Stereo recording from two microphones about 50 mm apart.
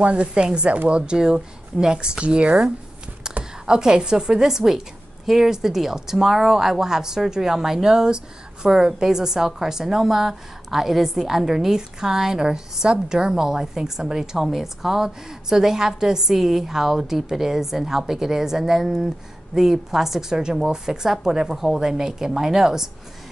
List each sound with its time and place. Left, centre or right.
0.0 s a woman's voice: right